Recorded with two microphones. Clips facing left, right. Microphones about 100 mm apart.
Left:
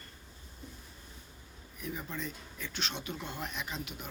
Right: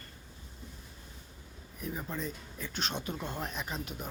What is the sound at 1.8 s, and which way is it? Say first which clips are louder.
Speech: right 2 dB; 40° right (ahead or behind).